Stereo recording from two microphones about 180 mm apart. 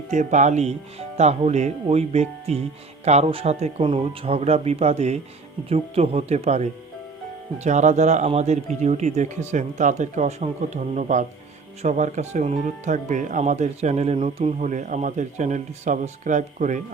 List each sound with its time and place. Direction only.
0.1 s speech: 40° right (ahead or behind)